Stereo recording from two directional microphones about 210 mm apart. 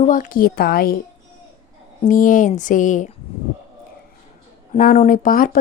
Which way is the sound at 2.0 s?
40° left (ahead or behind).